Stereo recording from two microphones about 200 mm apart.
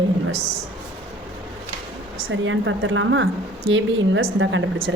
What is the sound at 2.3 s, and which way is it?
A woman's voice, 75° right (ahead or behind).